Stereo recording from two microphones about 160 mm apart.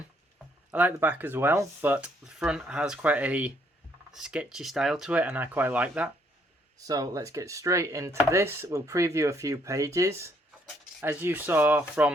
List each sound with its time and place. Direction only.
0.7 s speech: 10° right (ahead or behind)
6.7 s speech: 20° right (ahead or behind)